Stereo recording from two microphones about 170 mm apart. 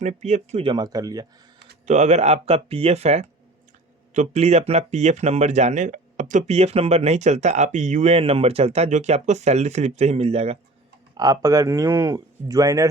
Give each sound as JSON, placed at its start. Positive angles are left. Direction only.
{"t": 0.0, "sound": "speech", "side_deg": -45}
{"t": 1.9, "sound": "speech", "side_deg": -40}
{"t": 11.2, "sound": "speech", "side_deg": -20}